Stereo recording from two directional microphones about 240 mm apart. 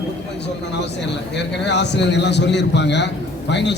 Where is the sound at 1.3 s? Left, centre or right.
Left.